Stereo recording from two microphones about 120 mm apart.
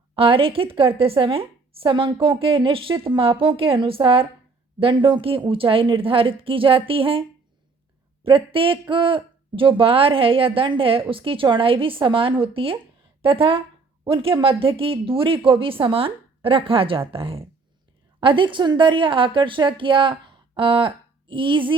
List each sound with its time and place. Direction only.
0.2 s a woman's voice: 45° right (ahead or behind)